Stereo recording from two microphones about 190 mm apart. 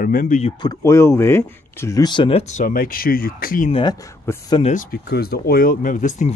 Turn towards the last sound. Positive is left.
turn(degrees=40)  # may be behind; listen again after turning